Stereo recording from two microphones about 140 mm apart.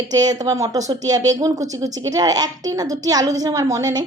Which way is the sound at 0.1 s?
25° right (ahead or behind).